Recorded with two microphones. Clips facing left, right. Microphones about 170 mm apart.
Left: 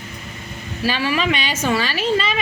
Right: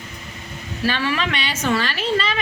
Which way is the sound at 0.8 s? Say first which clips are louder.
Left 2 dB; 10° left (ahead or behind).